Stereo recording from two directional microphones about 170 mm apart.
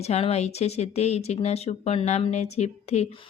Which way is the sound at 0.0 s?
40° left (ahead or behind).